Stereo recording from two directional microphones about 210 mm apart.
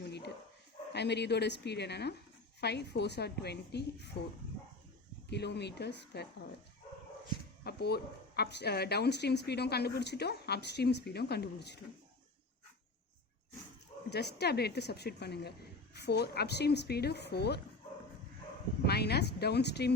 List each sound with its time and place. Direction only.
0.9 s a woman's voice: 55° left (ahead or behind)
5.3 s a woman's voice: 55° left (ahead or behind)
7.6 s a woman's voice: 50° left (ahead or behind)
14.1 s a woman's voice: 50° left (ahead or behind)
18.9 s a woman's voice: 50° left (ahead or behind)